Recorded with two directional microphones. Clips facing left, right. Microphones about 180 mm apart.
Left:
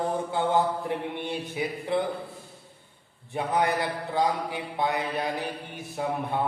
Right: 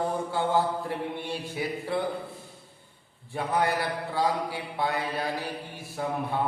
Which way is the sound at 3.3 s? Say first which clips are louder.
Left 1 dB; 20° left (ahead or behind).